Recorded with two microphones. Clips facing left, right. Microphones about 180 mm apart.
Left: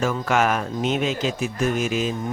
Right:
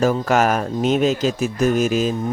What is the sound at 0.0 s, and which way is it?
Speech, 40° right (ahead or behind).